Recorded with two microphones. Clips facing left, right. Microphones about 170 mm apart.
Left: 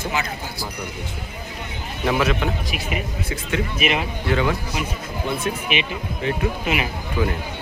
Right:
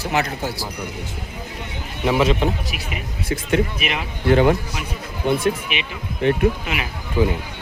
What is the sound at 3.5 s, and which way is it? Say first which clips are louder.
Speech: right 1 dB; 40° right (ahead or behind).